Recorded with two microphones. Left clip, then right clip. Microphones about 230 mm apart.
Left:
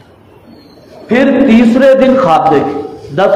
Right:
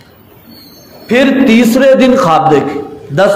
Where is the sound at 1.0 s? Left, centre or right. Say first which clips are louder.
Even; right.